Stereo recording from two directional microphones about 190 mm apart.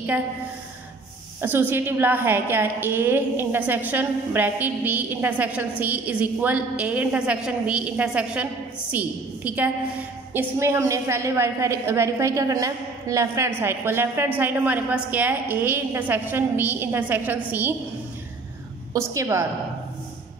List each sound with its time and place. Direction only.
1.4 s a woman's voice: 10° right (ahead or behind)
18.9 s a woman's voice: 15° right (ahead or behind)